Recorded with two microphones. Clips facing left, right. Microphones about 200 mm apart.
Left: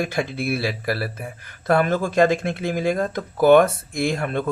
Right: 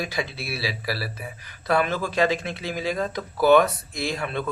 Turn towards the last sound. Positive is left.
turn(degrees=50)  # may be behind; listen again after turning